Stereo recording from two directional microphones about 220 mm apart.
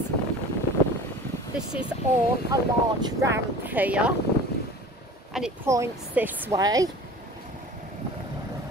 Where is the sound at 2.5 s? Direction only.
15° right (ahead or behind).